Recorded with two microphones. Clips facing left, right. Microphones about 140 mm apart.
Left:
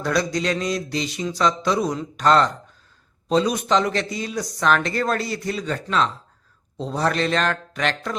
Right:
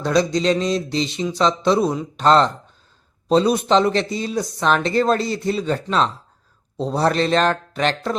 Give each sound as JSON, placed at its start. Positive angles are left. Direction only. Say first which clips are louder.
{"t": 0.0, "sound": "speech", "louder": "right 4 dB", "side_deg": -25}